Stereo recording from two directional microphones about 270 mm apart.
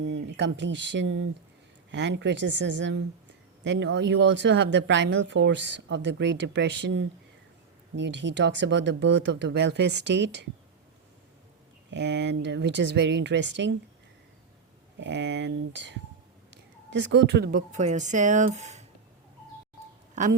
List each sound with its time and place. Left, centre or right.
0.0 s speech: right
11.9 s speech: right
14.9 s speech: right
20.2 s a woman's voice: right